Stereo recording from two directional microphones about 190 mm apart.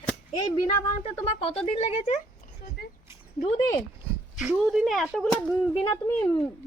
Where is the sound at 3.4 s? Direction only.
30° left (ahead or behind).